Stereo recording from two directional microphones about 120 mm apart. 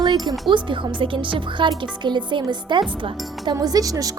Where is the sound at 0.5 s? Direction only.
45° right (ahead or behind).